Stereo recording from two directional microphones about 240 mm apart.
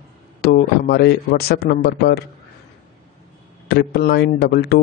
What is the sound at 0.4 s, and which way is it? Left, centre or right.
A man's voice, left.